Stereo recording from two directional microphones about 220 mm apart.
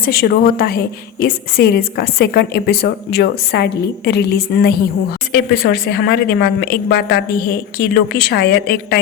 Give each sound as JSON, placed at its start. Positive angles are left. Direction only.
{"t": 0.0, "sound": "a woman's voice", "side_deg": 45}